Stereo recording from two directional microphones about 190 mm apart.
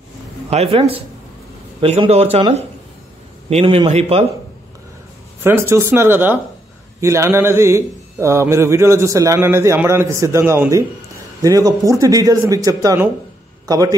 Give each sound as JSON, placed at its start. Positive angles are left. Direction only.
{"t": 0.5, "sound": "a man's voice", "side_deg": -30}
{"t": 5.4, "sound": "speech", "side_deg": -15}